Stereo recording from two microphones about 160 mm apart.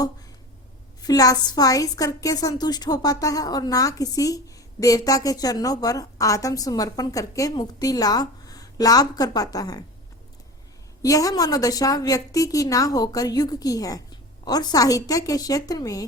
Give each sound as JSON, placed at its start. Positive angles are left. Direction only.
{"t": 1.0, "sound": "a woman's voice", "side_deg": 20}
{"t": 11.0, "sound": "a woman's voice", "side_deg": 20}